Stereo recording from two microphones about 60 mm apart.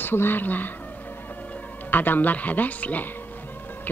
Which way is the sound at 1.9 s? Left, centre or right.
Left.